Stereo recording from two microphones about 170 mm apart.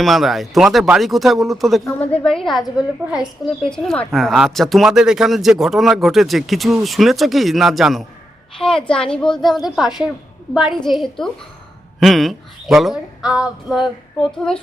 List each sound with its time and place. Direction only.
0.0 s a woman's voice: centre (ahead or behind)